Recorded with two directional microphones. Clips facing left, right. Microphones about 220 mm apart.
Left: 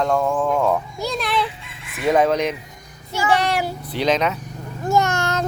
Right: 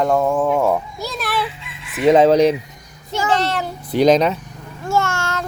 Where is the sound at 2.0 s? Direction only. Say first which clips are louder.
Right 6 dB; 20° right (ahead or behind).